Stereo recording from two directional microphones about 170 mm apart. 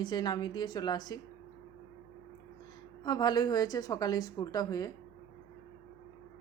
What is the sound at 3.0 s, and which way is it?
A woman's voice, 25° left (ahead or behind).